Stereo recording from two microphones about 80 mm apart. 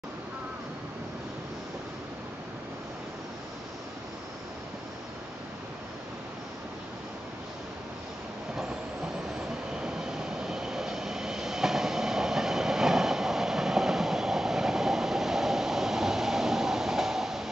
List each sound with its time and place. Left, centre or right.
9.8 s vehicle: centre